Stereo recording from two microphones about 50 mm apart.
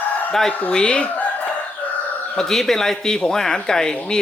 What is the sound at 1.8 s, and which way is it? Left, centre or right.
Chicken, left.